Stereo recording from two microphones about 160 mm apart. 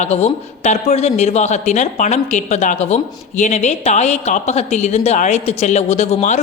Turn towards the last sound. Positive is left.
turn(degrees=45)  # may be behind; listen again after turning